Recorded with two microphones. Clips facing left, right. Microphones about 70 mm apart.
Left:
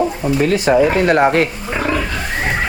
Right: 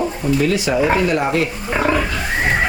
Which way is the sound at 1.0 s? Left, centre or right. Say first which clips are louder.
Left 5 dB; left.